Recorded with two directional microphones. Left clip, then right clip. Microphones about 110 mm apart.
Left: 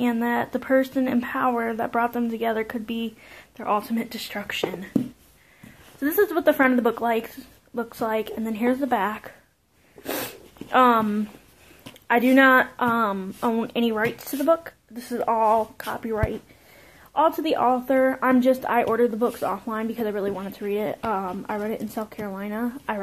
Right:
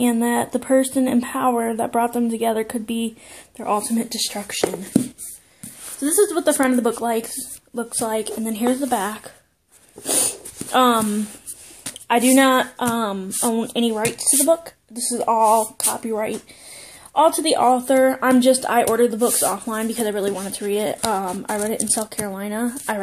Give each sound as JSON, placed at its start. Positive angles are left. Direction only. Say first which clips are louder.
{"t": 0.0, "sound": "speech", "louder": "right 4 dB", "side_deg": -45}
{"t": 6.0, "sound": "a woman's voice", "louder": "right 2 dB", "side_deg": -15}
{"t": 8.1, "sound": "a woman's voice", "louder": "right 2 dB", "side_deg": -30}
{"t": 10.0, "sound": "a sound", "louder": "right 6 dB", "side_deg": -30}
{"t": 11.8, "sound": "a woman's voice", "louder": "right 3 dB", "side_deg": -30}
{"t": 15.5, "sound": "a woman's voice", "louder": "right 4 dB", "side_deg": -25}
{"t": 16.0, "sound": "speech", "louder": "right 1 dB", "side_deg": -45}